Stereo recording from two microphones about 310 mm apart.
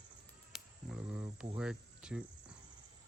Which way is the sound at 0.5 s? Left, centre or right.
Centre.